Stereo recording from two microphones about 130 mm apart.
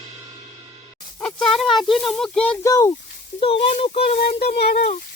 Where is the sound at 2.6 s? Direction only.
25° left (ahead or behind).